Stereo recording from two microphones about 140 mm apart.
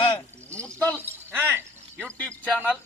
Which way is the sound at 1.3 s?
15° right (ahead or behind).